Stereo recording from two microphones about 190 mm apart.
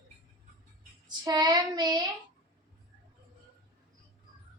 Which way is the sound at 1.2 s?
20° right (ahead or behind).